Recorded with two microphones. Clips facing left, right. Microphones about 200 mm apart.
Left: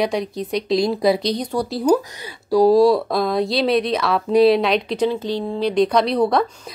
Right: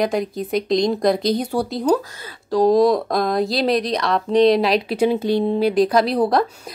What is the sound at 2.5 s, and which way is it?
Speech, 5° left (ahead or behind).